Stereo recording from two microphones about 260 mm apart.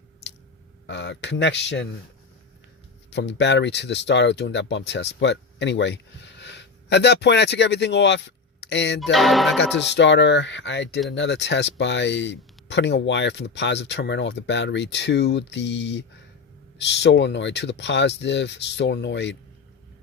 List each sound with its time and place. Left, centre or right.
0.9 s speech: left
3.1 s speech: left
9.1 s speech: centre
9.6 s speech: left